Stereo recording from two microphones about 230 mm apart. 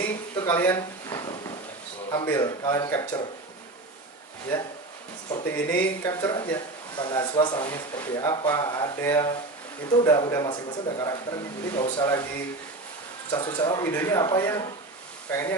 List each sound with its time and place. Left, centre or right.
0.3 s a sound: centre
2.0 s speech: centre
5.3 s speech: centre
13.3 s speech: left